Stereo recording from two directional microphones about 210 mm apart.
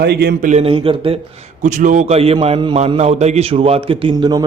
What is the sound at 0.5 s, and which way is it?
Speech, 25° right (ahead or behind).